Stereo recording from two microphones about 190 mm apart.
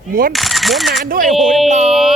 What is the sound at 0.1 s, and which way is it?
Speech, 50° right (ahead or behind).